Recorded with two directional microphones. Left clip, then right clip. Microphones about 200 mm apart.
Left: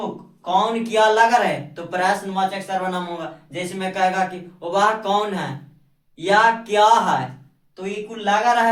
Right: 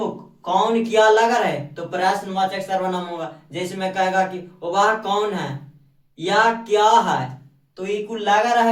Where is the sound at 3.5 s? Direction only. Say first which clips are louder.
Right 2 dB; 15° left (ahead or behind).